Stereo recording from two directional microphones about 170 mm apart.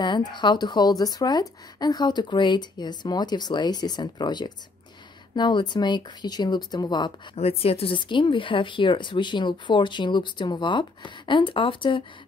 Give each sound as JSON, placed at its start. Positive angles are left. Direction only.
{"t": 0.0, "sound": "speech", "side_deg": 25}
{"t": 7.3, "sound": "speech", "side_deg": 35}